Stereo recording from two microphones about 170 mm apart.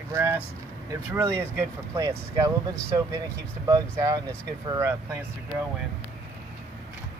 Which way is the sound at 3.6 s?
20° right (ahead or behind).